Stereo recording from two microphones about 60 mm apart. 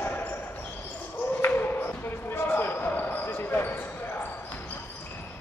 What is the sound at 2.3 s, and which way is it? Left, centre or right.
Basketball bounce, left.